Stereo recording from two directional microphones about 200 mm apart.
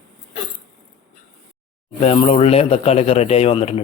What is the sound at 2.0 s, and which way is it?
A man's voice, 30° left (ahead or behind).